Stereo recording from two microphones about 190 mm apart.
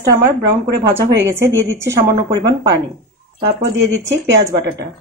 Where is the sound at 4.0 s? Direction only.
70° right (ahead or behind).